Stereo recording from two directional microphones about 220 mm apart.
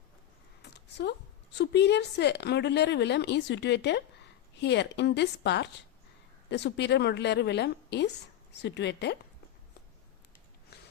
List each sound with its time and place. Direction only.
0.6 s a woman's voice: 50° left (ahead or behind)